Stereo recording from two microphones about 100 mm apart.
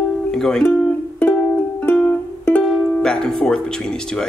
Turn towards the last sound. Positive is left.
turn(degrees=5)  # may be behind; listen again after turning